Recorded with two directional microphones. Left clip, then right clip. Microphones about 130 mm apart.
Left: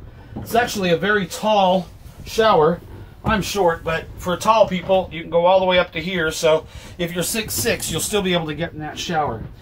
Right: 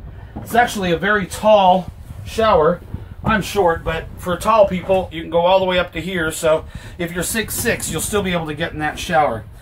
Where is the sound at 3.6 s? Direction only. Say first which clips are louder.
Even; centre (ahead or behind).